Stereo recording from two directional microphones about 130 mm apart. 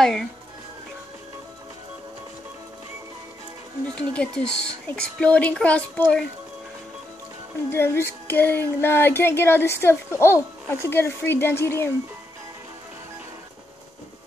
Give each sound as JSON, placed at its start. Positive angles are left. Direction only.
{"t": 0.0, "sound": "speech", "side_deg": 5}
{"t": 4.1, "sound": "music", "side_deg": 5}
{"t": 7.7, "sound": "music", "side_deg": 20}